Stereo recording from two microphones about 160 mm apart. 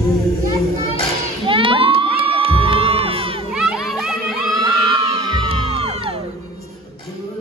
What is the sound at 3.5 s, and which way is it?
Music, centre (ahead or behind).